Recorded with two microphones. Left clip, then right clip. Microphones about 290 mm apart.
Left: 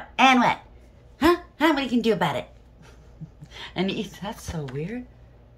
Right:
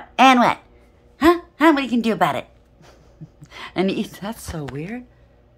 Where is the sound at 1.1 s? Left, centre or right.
Centre.